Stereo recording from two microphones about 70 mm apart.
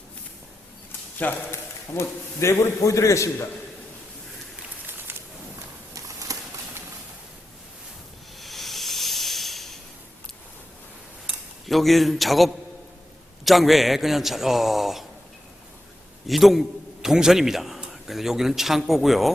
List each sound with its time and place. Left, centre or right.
1.2 s speech: left
2.0 s a man's voice: left
5.9 s horse: right
8.4 s hiss: centre
11.6 s a man's voice: centre
16.2 s a man's voice: centre